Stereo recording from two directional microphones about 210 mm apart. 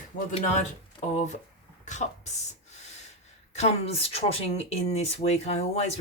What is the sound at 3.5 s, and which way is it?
Speech, 30° left (ahead or behind).